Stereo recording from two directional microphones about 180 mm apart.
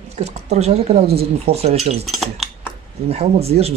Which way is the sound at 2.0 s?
Centre (ahead or behind).